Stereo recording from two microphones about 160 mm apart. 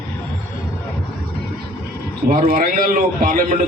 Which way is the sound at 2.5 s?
65° right (ahead or behind).